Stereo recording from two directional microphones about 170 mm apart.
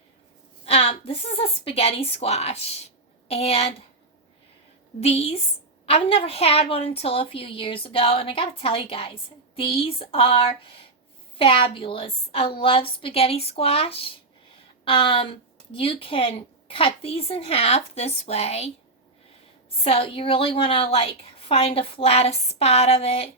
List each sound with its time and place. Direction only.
0.6 s a woman's voice: 35° left (ahead or behind)
4.9 s a woman's voice: 35° left (ahead or behind)
19.8 s a woman's voice: 35° left (ahead or behind)